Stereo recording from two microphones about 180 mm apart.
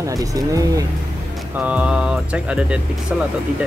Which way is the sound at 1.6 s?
5° right (ahead or behind).